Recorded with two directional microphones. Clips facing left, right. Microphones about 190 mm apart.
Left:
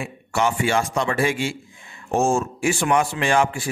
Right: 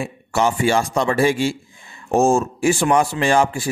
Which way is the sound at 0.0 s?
35° right (ahead or behind).